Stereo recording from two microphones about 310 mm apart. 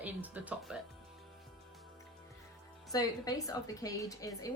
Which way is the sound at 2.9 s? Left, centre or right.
Centre.